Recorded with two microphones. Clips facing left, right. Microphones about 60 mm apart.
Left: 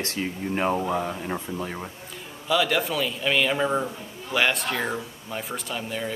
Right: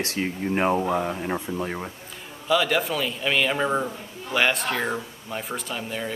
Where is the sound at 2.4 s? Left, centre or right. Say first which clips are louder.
Right 1 dB; centre.